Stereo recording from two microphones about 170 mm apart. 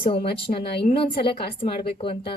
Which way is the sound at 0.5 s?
45° left (ahead or behind).